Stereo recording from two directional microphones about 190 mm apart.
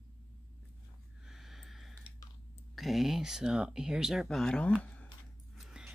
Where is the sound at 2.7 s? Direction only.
Centre (ahead or behind).